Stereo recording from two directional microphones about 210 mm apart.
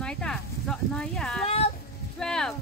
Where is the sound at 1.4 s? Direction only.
30° left (ahead or behind).